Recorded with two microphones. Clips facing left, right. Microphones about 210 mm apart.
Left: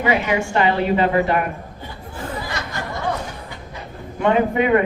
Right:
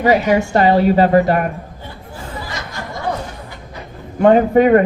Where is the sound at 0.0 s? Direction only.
40° right (ahead or behind).